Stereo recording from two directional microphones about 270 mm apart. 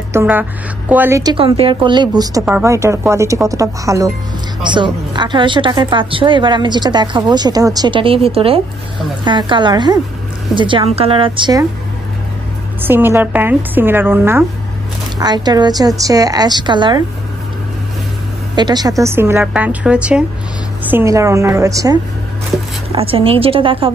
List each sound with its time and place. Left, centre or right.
0.1 s a woman's voice: centre
12.8 s a woman's voice: centre
18.6 s a woman's voice: centre